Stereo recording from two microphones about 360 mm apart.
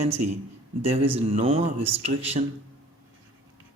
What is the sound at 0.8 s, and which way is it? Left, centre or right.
Speech, centre.